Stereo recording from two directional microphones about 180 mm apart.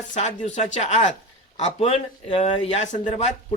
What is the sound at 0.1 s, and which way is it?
Speech, 40° left (ahead or behind).